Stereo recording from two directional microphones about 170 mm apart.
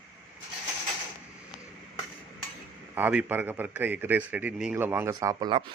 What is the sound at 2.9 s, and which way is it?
A man's voice, 10° right (ahead or behind).